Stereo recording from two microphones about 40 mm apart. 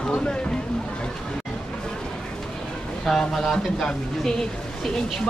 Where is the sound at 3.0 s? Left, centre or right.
Centre.